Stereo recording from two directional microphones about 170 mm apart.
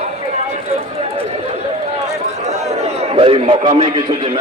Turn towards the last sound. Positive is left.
turn(degrees=-35)  # may be behind; listen again after turning